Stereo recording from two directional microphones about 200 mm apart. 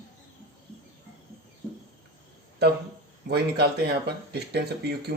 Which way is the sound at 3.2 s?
55° right (ahead or behind).